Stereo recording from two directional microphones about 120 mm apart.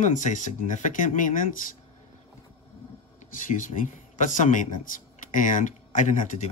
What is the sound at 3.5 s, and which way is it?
Speech, 90° left.